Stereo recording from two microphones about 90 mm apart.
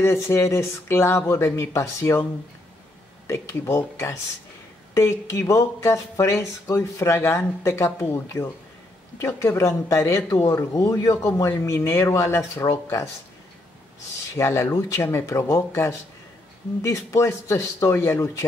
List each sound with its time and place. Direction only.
0.0 s speech: 30° left (ahead or behind)
3.3 s speech: 30° left (ahead or behind)
14.3 s speech: 30° left (ahead or behind)